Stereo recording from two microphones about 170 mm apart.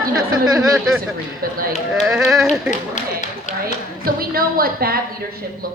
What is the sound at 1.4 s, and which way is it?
Speech, 60° right (ahead or behind).